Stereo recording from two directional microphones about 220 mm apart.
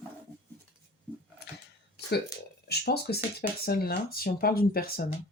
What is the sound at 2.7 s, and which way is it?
Speech, 45° left (ahead or behind).